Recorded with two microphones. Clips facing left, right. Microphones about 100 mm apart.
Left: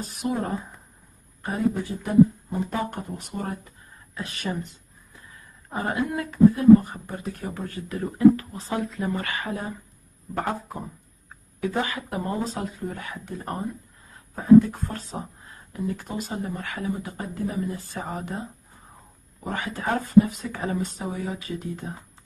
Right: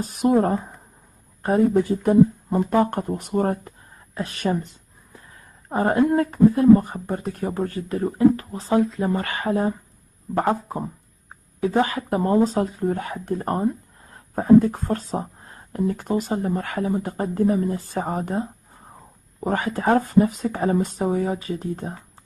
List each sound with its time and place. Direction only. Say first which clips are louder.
0.0 s speech: right 9 dB; 50° right (ahead or behind)
5.3 s a sound: right 6 dB; 45° right (ahead or behind)
6.3 s speech: left 1 dB; 40° right (ahead or behind)